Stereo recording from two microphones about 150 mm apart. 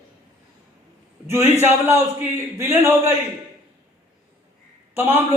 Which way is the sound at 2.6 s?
15° right (ahead or behind).